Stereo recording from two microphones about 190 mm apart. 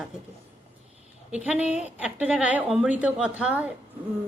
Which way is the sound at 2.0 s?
5° right (ahead or behind).